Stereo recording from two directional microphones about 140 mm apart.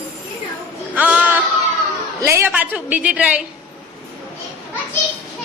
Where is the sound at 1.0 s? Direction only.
10° right (ahead or behind).